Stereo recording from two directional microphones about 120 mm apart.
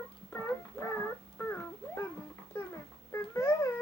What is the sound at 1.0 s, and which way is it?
Dog, 20° left (ahead or behind).